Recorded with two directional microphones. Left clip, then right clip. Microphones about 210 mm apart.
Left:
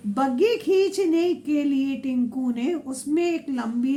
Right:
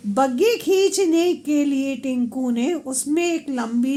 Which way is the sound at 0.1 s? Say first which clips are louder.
Right 3 dB; 50° right (ahead or behind).